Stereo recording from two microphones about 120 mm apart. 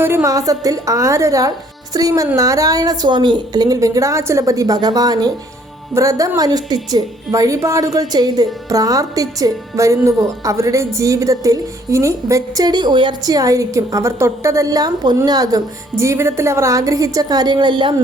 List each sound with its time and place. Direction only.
0.0 s a woman's voice: 20° right (ahead or behind); by 17.9 s 40° right (ahead or behind)